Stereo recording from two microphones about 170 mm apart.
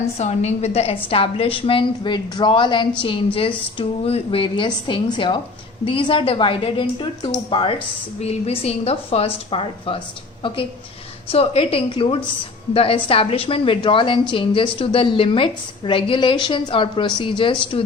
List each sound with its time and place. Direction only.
0.2 s a woman's voice: 40° left (ahead or behind)